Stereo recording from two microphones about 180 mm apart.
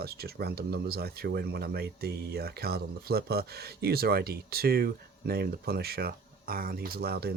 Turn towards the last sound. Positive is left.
turn(degrees=-60)  # may be behind; listen again after turning